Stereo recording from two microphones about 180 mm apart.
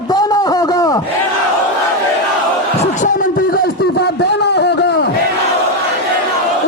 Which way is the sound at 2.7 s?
45° left (ahead or behind).